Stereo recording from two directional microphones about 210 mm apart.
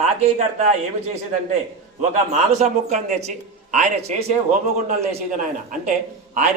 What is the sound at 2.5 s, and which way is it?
Speech, 35° right (ahead or behind).